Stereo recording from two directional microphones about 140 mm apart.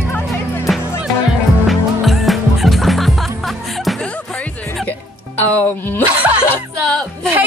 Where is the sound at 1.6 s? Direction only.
Centre (ahead or behind).